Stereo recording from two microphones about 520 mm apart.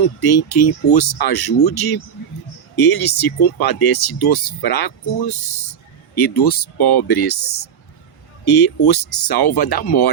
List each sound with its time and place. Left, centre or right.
0.0 s speech: left